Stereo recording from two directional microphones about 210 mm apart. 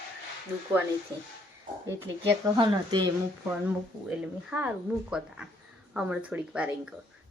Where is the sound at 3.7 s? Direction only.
5° right (ahead or behind).